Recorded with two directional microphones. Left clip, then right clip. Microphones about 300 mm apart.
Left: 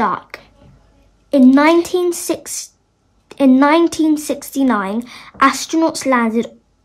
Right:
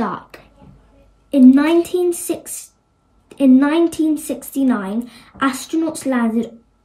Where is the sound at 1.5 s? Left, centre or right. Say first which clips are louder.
Left 4 dB; left.